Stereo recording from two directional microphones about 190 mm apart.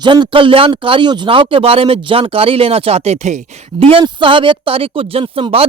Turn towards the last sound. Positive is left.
turn(degrees=-30)  # may be behind; listen again after turning